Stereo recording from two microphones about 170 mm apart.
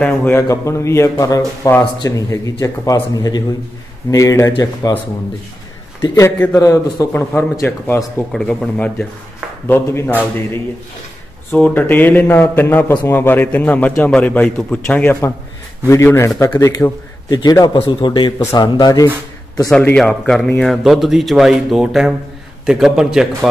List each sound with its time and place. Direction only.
0.0 s a man's voice: 10° left (ahead or behind)
6.0 s a man's voice: 15° left (ahead or behind)
8.3 s a man's voice: 5° left (ahead or behind)
11.5 s a man's voice: 10° left (ahead or behind); by 19.0 s 25° left (ahead or behind)
19.7 s speech: 5° left (ahead or behind)